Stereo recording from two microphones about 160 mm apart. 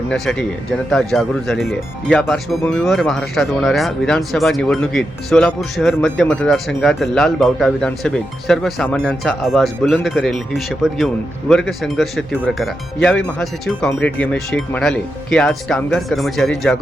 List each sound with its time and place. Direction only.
0.1 s speech: 5° left (ahead or behind)